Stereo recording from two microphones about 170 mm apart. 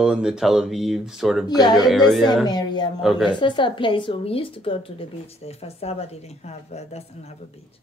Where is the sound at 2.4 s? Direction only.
25° left (ahead or behind).